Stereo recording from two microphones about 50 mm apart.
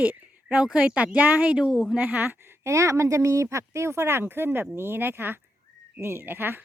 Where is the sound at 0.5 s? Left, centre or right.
Right.